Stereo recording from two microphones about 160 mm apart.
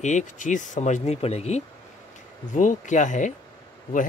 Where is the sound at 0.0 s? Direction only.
50° left (ahead or behind).